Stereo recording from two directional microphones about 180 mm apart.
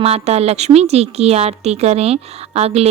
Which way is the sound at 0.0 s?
35° right (ahead or behind).